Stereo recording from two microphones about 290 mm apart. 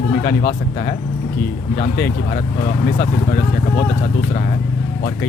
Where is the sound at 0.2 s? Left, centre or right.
Left.